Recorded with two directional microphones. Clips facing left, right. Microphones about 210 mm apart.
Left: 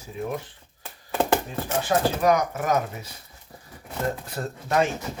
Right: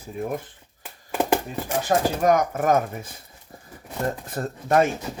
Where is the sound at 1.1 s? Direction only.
10° right (ahead or behind).